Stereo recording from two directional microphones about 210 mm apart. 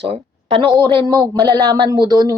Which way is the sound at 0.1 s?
25° right (ahead or behind).